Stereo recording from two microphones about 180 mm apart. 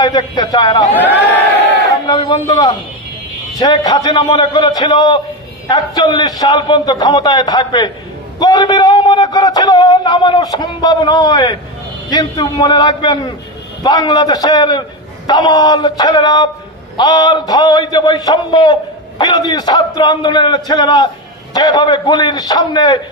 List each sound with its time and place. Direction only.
0.0 s a man's voice: 25° left (ahead or behind)
2.0 s a man's voice: 25° left (ahead or behind)